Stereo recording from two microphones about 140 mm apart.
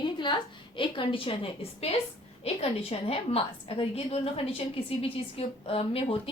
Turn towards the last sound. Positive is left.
turn(degrees=45)  # may be behind; listen again after turning